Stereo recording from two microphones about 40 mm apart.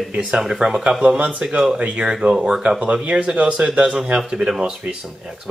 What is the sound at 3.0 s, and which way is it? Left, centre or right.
Speech, right.